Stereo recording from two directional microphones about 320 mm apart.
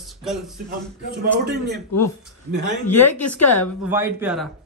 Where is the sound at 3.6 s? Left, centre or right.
Centre.